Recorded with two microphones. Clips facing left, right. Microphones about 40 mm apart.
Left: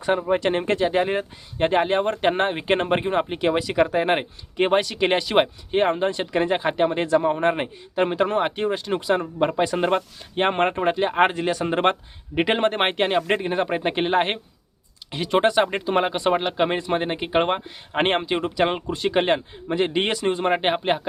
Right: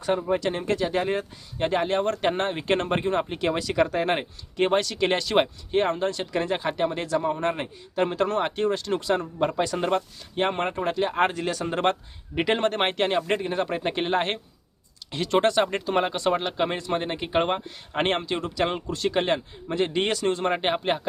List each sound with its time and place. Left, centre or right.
0.0 s speech: left